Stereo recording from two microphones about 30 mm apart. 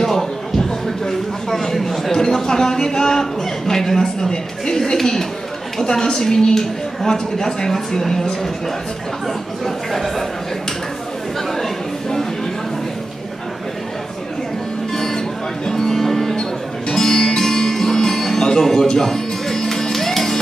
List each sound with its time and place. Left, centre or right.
0.0 s a sound: centre
2.1 s speech: centre
9.9 s a man's voice: centre
15.0 s music: centre